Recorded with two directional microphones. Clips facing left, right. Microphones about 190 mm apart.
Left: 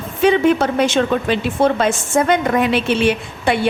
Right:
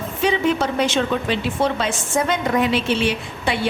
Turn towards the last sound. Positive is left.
turn(degrees=55)  # may be behind; listen again after turning